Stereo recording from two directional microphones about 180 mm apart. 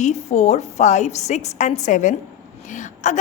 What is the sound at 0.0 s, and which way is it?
A woman's voice, 40° left (ahead or behind).